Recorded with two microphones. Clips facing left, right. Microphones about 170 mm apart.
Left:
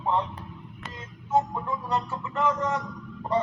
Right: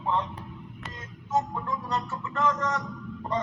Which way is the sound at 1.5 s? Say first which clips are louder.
Left 2 dB; 15° left (ahead or behind).